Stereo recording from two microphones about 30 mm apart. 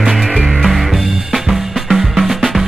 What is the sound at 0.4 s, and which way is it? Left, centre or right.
Music, centre.